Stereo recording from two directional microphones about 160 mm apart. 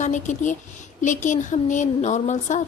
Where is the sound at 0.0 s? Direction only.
50° left (ahead or behind).